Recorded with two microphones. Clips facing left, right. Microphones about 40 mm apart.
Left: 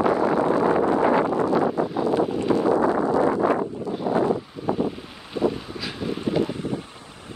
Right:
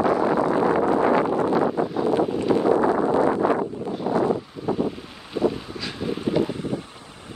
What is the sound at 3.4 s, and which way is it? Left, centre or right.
Wind noise, centre.